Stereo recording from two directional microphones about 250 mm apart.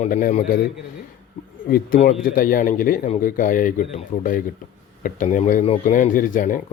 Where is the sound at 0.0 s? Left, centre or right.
Left.